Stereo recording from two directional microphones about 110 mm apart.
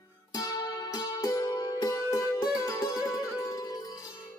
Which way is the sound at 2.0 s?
25° left (ahead or behind).